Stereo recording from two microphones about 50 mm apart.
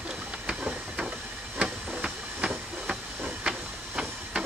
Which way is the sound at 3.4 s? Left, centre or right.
Centre.